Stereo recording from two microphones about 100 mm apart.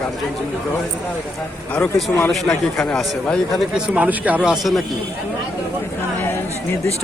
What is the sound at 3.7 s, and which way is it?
Speech, 15° right (ahead or behind).